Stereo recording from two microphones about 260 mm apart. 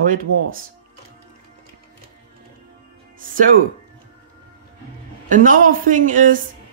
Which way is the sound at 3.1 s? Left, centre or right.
Right.